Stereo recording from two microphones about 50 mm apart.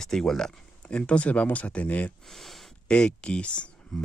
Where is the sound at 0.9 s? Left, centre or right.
Left.